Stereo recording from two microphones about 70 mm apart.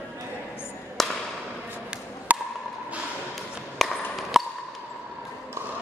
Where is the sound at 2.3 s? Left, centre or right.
Right.